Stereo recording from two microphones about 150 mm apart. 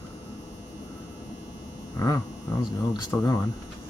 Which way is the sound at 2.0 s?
20° left (ahead or behind).